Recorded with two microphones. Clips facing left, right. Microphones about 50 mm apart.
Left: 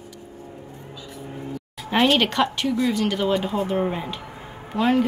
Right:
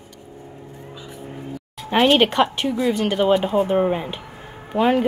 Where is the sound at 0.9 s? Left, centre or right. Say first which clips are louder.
Right 1 dB; right.